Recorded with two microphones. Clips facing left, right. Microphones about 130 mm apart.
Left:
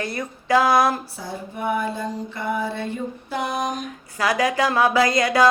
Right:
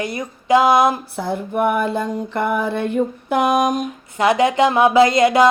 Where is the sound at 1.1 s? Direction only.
60° right (ahead or behind).